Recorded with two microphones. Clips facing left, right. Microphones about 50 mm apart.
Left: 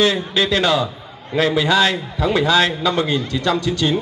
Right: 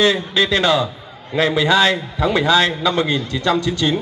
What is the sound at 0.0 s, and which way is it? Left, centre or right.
A man's voice, right.